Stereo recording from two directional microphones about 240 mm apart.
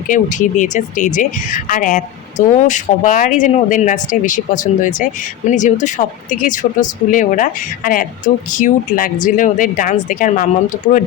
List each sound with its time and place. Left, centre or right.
0.1 s a woman's voice: left